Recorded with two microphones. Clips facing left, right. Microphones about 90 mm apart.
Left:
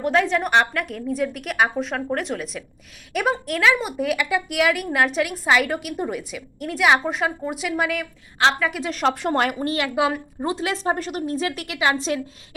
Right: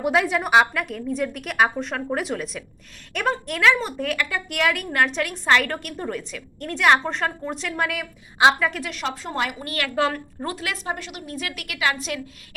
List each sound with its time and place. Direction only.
0.0 s a woman's voice: 5° right (ahead or behind)
8.9 s a woman's voice: 45° left (ahead or behind)
9.7 s a woman's voice: 15° left (ahead or behind)
10.5 s a woman's voice: 25° left (ahead or behind)